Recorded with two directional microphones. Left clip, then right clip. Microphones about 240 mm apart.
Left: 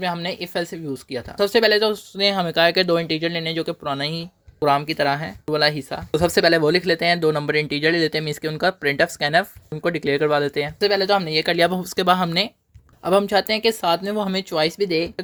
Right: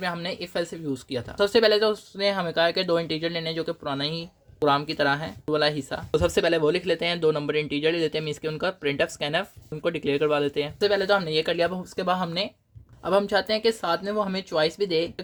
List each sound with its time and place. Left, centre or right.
0.0 s speech: left
13.0 s speech: left